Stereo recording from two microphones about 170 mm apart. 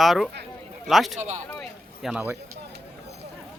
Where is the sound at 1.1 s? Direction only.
45° right (ahead or behind).